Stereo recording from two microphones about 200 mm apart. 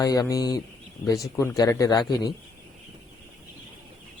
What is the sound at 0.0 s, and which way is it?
Speech, 15° left (ahead or behind).